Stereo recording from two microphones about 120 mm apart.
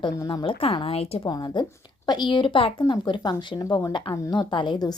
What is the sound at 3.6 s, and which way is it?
Speech, 25° left (ahead or behind).